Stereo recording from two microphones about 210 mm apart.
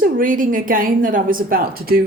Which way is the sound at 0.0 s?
40° right (ahead or behind).